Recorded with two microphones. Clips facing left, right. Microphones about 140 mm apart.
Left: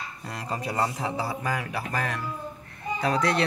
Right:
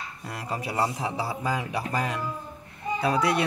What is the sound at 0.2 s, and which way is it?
Speech, 5° right (ahead or behind).